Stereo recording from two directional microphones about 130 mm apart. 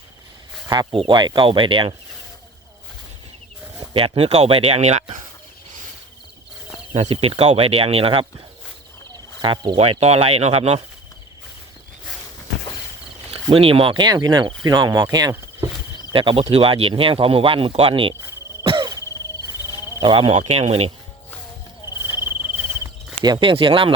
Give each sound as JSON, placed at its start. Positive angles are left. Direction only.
{"t": 0.7, "sound": "speech", "side_deg": -30}
{"t": 3.9, "sound": "speech", "side_deg": -45}
{"t": 6.9, "sound": "speech", "side_deg": -55}
{"t": 9.4, "sound": "speech", "side_deg": -40}
{"t": 9.7, "sound": "speech", "side_deg": -50}
{"t": 13.5, "sound": "speech", "side_deg": -45}
{"t": 16.1, "sound": "speech", "side_deg": -45}
{"t": 18.6, "sound": "a sound", "side_deg": -45}
{"t": 20.0, "sound": "speech", "side_deg": -45}
{"t": 23.2, "sound": "speech", "side_deg": -35}